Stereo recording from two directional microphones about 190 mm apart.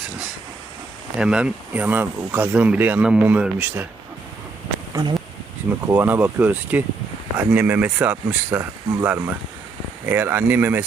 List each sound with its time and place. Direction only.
1.2 s speech: 5° right (ahead or behind)
4.9 s speech: 20° right (ahead or behind)